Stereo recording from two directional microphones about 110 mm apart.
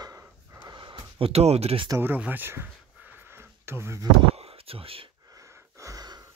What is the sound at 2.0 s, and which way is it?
Speech, 15° right (ahead or behind).